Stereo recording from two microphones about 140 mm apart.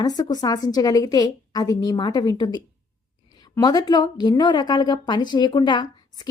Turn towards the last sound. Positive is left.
turn(degrees=30)  # may be behind; listen again after turning